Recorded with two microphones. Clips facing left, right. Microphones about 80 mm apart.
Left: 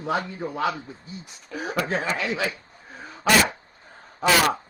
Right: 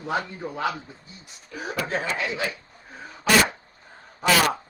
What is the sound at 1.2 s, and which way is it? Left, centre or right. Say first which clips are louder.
Speech: left 2 dB; left.